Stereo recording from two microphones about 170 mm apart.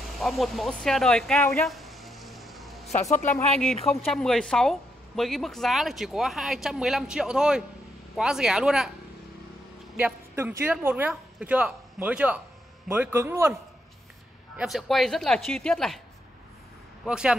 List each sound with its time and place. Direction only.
0.1 s a sound: centre (ahead or behind)
2.9 s speech: 45° left (ahead or behind)
3.5 s speech: centre (ahead or behind)
9.9 s speech: 10° right (ahead or behind)
14.6 s speech: centre (ahead or behind)
17.0 s speech: 5° right (ahead or behind)